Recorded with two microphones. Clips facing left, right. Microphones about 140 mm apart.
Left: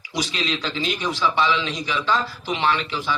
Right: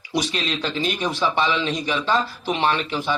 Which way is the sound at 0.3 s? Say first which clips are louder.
Right 1 dB; 55° right (ahead or behind).